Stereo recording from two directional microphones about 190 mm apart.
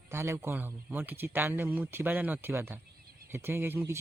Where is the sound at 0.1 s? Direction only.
15° right (ahead or behind).